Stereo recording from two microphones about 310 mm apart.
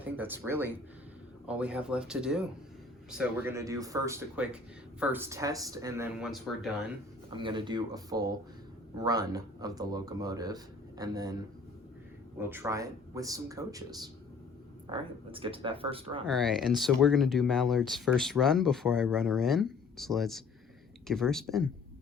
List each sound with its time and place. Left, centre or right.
0.0 s speech: centre
7.3 s speech: centre
12.4 s speech: centre
16.2 s speech: centre